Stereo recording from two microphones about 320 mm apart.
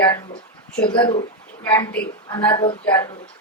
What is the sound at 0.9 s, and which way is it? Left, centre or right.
A woman's voice, centre.